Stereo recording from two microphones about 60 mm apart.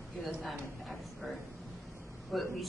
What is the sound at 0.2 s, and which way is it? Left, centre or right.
A woman's voice, centre.